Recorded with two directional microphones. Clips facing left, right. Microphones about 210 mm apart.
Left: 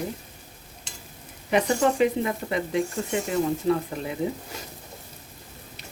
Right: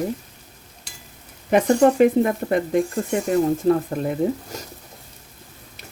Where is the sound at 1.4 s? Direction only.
50° right (ahead or behind).